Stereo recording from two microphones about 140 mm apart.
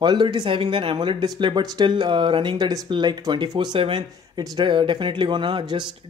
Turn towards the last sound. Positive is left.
turn(degrees=-35)  # may be behind; listen again after turning